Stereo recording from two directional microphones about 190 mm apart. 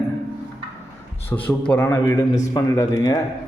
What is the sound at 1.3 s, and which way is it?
A man's voice, 10° left (ahead or behind).